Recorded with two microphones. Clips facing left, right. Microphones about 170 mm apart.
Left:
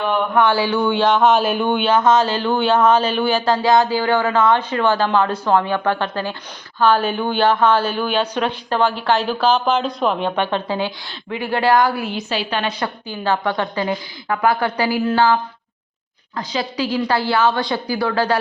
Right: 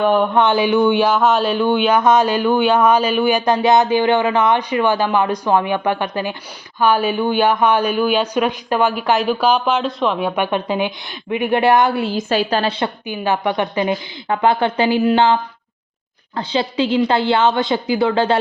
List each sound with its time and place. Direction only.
0.3 s speech: 20° right (ahead or behind)
1.1 s speech: centre (ahead or behind)
1.7 s speech: 10° right (ahead or behind)
10.2 s a woman's voice: 10° right (ahead or behind)
12.1 s a woman's voice: 45° right (ahead or behind); by 12.9 s 30° right (ahead or behind)
13.1 s a woman's voice: 15° right (ahead or behind)